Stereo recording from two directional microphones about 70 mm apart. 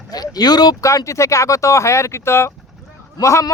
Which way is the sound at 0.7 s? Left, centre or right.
Left.